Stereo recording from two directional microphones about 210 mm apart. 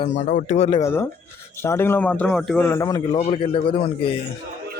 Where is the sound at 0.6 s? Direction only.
20° left (ahead or behind).